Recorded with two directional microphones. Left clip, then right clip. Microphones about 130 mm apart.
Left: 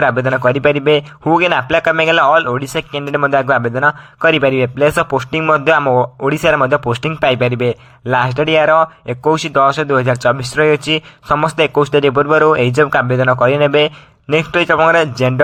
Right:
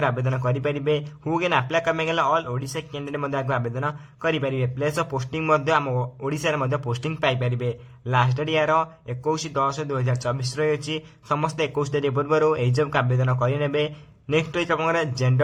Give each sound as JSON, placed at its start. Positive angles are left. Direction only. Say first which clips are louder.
{"t": 0.0, "sound": "a man's voice", "louder": "left 12 dB", "side_deg": 45}
{"t": 7.2, "sound": "a man's voice", "louder": "left 10 dB", "side_deg": 45}